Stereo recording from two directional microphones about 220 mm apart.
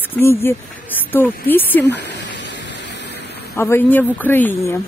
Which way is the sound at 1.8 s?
50° left (ahead or behind).